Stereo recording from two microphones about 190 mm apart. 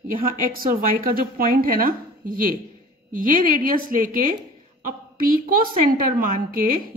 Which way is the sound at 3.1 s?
45° right (ahead or behind).